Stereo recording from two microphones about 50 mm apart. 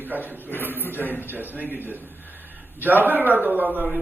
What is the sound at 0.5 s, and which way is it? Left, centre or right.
Speech, left.